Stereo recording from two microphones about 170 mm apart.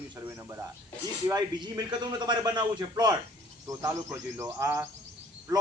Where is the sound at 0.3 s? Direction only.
15° right (ahead or behind).